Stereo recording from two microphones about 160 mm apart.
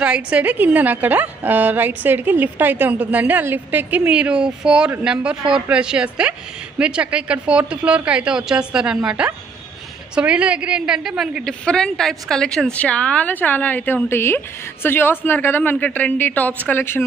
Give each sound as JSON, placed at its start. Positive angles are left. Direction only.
{"t": 0.3, "sound": "a woman's voice", "side_deg": -10}